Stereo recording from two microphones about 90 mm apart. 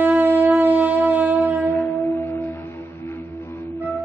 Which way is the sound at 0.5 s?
20° right (ahead or behind).